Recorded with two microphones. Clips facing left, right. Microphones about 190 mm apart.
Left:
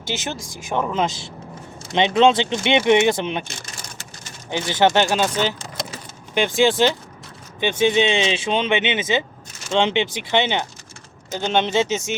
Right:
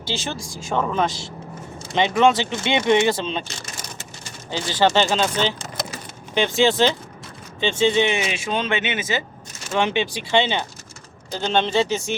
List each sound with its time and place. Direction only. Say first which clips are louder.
0.1 s speech: even; 20° left (ahead or behind)
4.5 s speech: left 1 dB; 20° left (ahead or behind)